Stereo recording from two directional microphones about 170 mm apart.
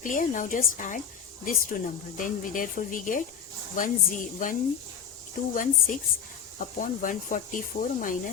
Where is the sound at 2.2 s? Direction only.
50° left (ahead or behind).